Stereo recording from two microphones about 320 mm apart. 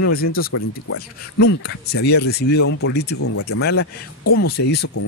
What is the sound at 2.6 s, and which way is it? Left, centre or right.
Speech, left.